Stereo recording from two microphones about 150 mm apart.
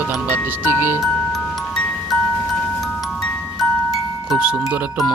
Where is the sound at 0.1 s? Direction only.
15° right (ahead or behind).